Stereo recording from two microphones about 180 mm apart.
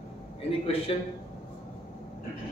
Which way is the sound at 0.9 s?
30° left (ahead or behind).